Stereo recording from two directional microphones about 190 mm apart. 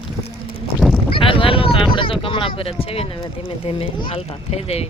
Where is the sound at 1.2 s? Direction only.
30° left (ahead or behind).